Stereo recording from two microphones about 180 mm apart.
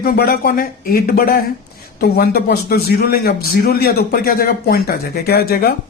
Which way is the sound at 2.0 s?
65° left (ahead or behind).